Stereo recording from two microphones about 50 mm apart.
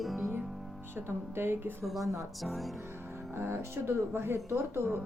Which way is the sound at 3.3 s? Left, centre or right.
Right.